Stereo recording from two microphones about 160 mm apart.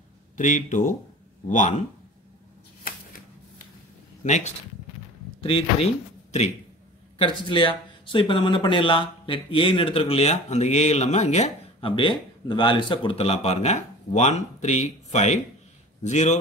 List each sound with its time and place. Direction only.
0.4 s speech: 50° left (ahead or behind)
4.2 s speech: 45° left (ahead or behind)
5.4 s speech: 35° left (ahead or behind)
7.2 s speech: 30° left (ahead or behind); by 16.3 s 45° left (ahead or behind)